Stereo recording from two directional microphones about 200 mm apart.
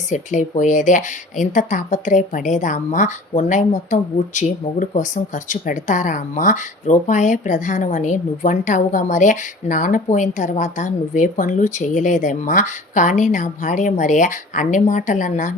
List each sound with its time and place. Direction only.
0.1 s speech: 40° left (ahead or behind)